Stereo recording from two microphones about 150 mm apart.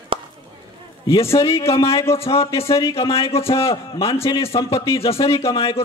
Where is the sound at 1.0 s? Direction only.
40° left (ahead or behind).